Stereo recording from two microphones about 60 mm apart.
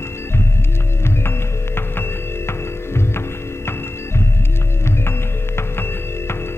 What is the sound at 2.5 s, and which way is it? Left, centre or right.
Music, left.